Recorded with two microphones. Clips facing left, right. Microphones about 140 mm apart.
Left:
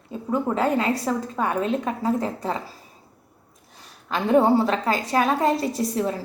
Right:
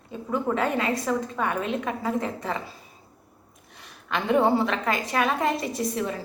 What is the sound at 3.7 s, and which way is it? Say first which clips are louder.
A woman's voice: left 2 dB; 35° left (ahead or behind).